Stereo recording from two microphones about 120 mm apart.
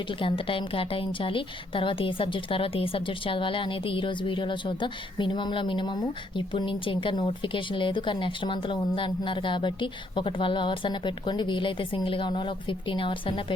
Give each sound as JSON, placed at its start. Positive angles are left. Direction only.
{"t": 0.1, "sound": "a woman's voice", "side_deg": 45}